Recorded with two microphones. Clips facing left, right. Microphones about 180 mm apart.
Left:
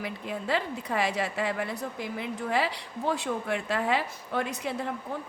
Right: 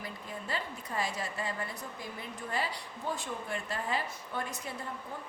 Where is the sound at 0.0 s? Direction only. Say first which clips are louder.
Left 8 dB; 80° left.